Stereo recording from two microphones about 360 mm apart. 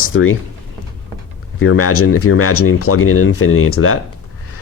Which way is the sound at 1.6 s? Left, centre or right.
Left.